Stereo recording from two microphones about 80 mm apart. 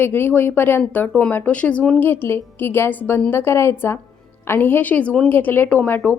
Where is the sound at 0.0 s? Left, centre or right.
Left.